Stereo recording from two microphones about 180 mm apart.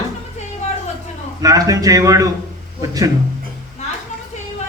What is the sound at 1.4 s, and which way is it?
Speech, 20° right (ahead or behind).